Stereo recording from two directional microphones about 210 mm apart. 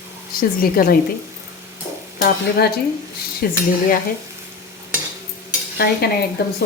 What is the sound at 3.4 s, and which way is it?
Speech, 45° left (ahead or behind).